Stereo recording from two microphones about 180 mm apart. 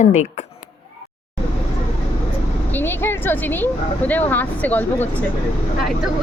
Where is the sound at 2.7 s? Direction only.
10° left (ahead or behind).